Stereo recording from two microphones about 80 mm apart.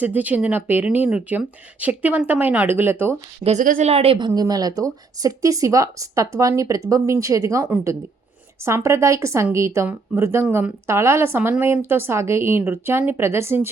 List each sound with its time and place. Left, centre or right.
0.0 s speech: right
4.4 s speech: right